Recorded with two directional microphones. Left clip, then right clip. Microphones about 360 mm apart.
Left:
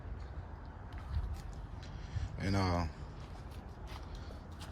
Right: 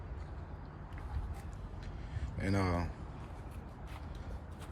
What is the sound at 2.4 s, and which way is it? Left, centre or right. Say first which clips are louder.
Speech: even; centre.